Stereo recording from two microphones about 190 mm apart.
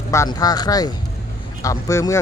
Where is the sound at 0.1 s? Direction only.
15° left (ahead or behind).